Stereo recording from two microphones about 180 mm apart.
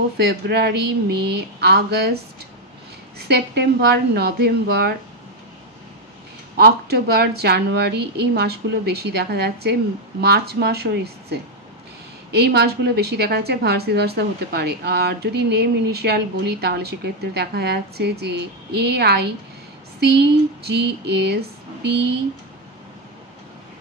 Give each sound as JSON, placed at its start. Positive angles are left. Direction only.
{"t": 0.2, "sound": "a woman's voice", "side_deg": -65}
{"t": 3.2, "sound": "a woman's voice", "side_deg": -65}
{"t": 6.5, "sound": "a woman's voice", "side_deg": -60}